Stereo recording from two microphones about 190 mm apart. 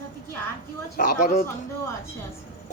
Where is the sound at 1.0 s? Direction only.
50° left (ahead or behind).